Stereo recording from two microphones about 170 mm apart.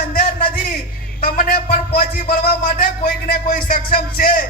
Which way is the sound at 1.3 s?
60° left (ahead or behind).